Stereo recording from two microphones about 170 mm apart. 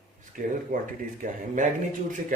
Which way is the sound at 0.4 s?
50° right (ahead or behind).